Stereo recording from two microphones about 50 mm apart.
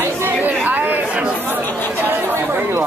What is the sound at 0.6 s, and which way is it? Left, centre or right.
Chatter, right.